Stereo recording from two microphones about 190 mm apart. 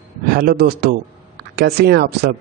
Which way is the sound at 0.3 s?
55° right (ahead or behind).